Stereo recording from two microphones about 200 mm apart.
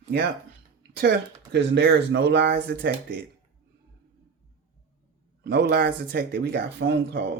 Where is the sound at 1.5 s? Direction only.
55° right (ahead or behind).